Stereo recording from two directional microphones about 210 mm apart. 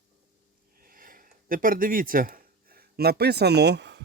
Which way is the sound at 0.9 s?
40° right (ahead or behind).